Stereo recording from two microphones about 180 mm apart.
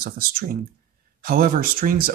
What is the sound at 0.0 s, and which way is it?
Speech, 55° right (ahead or behind).